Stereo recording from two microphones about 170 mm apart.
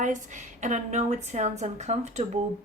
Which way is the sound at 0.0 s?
45° right (ahead or behind).